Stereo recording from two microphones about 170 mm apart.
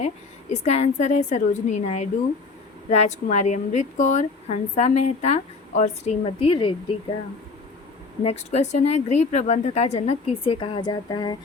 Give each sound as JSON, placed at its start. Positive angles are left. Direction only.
{"t": 0.0, "sound": "speech", "side_deg": 40}
{"t": 8.2, "sound": "speech", "side_deg": 40}